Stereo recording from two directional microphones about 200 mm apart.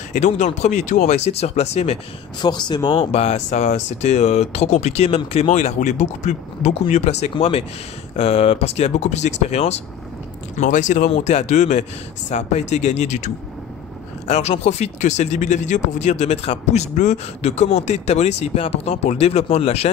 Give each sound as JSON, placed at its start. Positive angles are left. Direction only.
{"t": 0.1, "sound": "speech", "side_deg": 35}
{"t": 2.4, "sound": "speech", "side_deg": 20}